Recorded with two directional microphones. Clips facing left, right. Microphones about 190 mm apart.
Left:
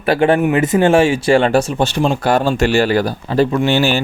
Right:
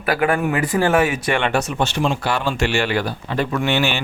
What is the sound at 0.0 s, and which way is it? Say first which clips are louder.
Speech: left 6 dB; 30° left (ahead or behind).